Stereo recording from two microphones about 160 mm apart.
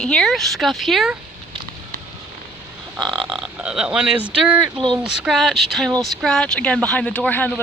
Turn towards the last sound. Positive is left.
turn(degrees=10)  # may be behind; listen again after turning